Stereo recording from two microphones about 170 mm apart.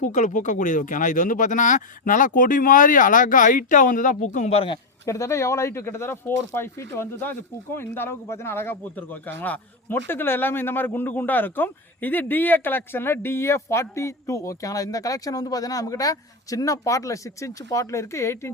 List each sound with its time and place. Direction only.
0.0 s speech: 45° left (ahead or behind)
5.0 s a man's voice: 20° left (ahead or behind)